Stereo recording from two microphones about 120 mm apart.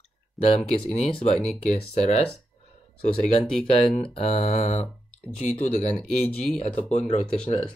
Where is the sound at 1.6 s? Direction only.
65° left (ahead or behind).